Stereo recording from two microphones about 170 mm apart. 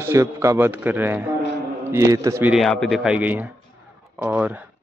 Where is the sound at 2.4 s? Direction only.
Centre (ahead or behind).